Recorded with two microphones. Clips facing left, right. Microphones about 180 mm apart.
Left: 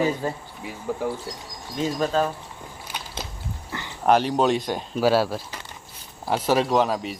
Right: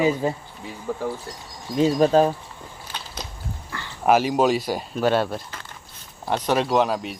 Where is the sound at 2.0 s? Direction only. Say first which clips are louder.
Right 6 dB; 35° right (ahead or behind).